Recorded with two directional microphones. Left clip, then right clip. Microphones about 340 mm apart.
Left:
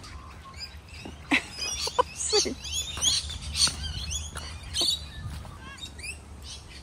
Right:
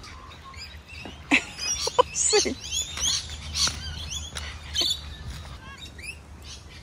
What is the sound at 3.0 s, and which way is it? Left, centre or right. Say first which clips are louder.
Rodents: left 4 dB; centre.